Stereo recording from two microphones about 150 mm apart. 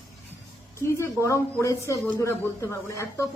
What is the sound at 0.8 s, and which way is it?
Speech, 20° left (ahead or behind).